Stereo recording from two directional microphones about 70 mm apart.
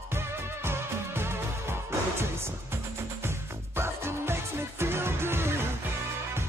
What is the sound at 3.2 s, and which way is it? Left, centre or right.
Music, right.